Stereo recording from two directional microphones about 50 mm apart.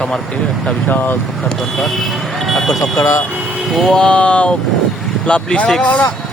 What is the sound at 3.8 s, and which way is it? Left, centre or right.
Speech, centre.